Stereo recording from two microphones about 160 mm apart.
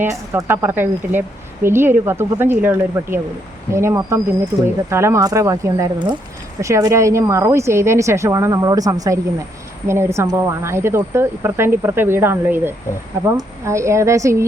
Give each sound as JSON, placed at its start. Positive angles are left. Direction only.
{"t": 0.0, "sound": "a woman's voice", "side_deg": -15}